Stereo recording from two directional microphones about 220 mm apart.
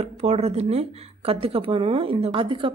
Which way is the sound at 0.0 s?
30° right (ahead or behind).